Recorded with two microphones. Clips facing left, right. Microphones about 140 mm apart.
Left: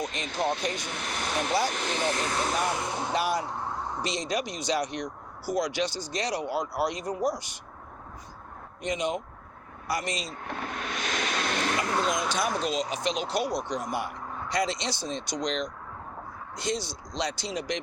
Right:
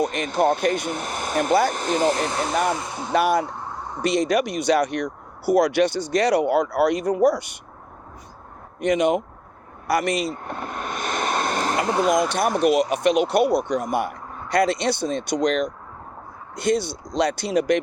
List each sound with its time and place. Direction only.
0.0 s speech: 60° right (ahead or behind); by 2.3 s 35° right (ahead or behind)
2.7 s speech: 15° left (ahead or behind)
3.1 s speech: 55° right (ahead or behind)
8.8 s speech: 65° right (ahead or behind)
9.8 s a sound: 60° right (ahead or behind); by 11.8 s 45° right (ahead or behind)
11.9 s speech: 10° right (ahead or behind)
12.3 s speech: 65° right (ahead or behind)